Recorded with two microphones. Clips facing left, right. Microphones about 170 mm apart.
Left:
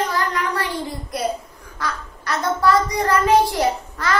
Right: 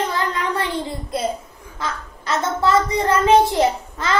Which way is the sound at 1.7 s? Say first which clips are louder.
Even; 20° right (ahead or behind).